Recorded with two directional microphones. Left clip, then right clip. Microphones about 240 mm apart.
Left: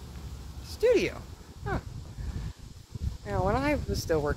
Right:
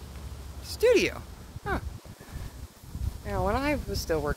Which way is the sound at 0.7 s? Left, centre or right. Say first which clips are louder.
Right 2 dB; right.